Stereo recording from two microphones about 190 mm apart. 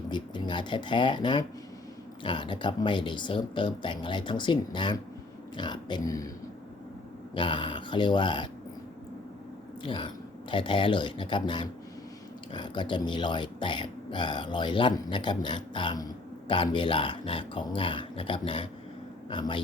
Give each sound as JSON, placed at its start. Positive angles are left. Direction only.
{"t": 0.1, "sound": "speech", "side_deg": 25}
{"t": 7.3, "sound": "speech", "side_deg": 25}
{"t": 9.8, "sound": "speech", "side_deg": 25}